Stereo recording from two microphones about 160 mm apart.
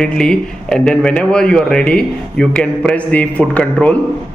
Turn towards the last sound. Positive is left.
turn(degrees=10)  # may be behind; listen again after turning